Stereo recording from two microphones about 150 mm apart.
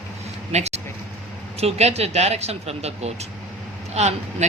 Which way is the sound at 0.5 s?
45° right (ahead or behind).